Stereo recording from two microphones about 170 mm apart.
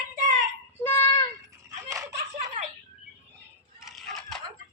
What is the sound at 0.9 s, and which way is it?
Child singing, 15° left (ahead or behind).